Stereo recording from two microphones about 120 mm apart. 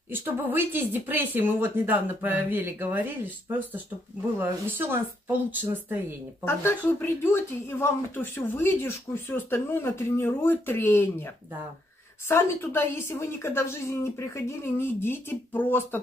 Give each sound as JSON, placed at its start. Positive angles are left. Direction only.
{"t": 0.1, "sound": "speech", "side_deg": -20}
{"t": 6.4, "sound": "speech", "side_deg": 20}